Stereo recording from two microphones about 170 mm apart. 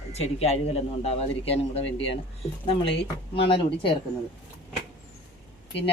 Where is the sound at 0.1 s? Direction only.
35° left (ahead or behind).